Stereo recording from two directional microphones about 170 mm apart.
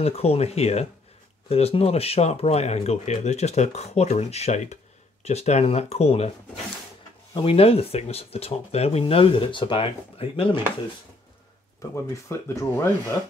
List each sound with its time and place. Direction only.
0.0 s speech: 35° left (ahead or behind)
11.8 s speech: 15° left (ahead or behind)